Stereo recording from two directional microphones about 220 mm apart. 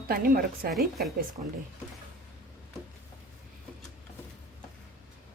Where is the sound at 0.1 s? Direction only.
40° right (ahead or behind).